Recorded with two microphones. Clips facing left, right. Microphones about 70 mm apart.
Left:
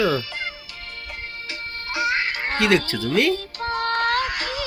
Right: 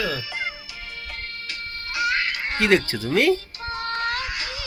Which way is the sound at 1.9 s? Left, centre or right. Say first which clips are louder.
Left 1 dB; left.